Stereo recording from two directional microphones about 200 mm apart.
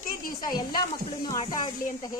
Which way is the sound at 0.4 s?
20° left (ahead or behind).